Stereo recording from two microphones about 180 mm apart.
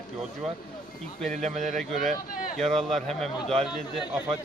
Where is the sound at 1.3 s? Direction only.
40° right (ahead or behind).